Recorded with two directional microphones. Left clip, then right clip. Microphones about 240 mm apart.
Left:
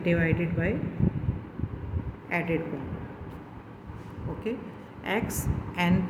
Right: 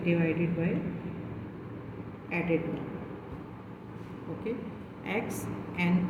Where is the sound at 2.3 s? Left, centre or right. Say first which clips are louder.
Left 4 dB; left.